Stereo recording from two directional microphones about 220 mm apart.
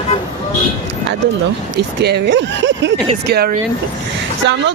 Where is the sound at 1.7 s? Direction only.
50° right (ahead or behind).